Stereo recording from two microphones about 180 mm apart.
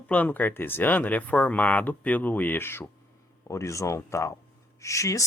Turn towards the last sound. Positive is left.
turn(degrees=15)  # may be behind; listen again after turning